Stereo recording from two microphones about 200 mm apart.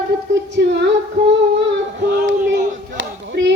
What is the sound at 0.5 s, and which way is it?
Female singing, 60° right (ahead or behind).